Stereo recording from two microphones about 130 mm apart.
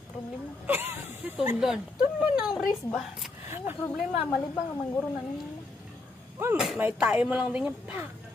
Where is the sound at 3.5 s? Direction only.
15° right (ahead or behind).